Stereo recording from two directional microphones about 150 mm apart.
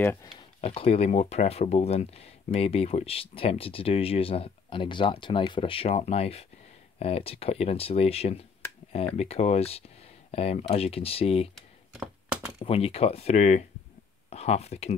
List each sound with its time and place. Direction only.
0.0 s speech: 15° left (ahead or behind)
0.6 s speech: 45° left (ahead or behind)
11.5 s a sound: 5° right (ahead or behind)
12.6 s speech: 40° left (ahead or behind)